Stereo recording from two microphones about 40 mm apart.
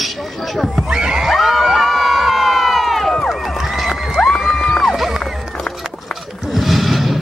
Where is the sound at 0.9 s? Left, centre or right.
Centre.